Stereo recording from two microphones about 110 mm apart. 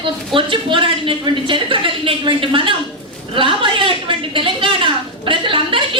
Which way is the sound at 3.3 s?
50° right (ahead or behind).